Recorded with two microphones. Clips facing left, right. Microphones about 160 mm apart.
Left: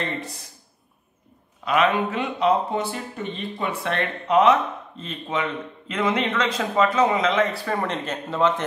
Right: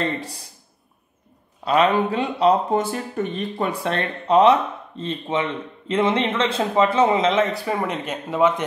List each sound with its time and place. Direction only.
1.6 s speech: 35° right (ahead or behind)
7.6 s speech: 10° right (ahead or behind)